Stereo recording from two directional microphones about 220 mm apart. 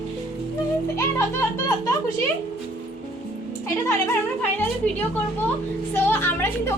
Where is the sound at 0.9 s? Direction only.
10° left (ahead or behind).